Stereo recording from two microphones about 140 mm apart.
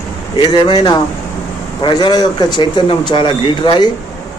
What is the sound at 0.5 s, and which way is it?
Speech, 35° left (ahead or behind).